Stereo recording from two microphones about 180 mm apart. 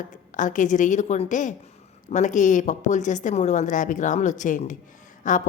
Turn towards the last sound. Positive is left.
turn(degrees=45)  # may be behind; listen again after turning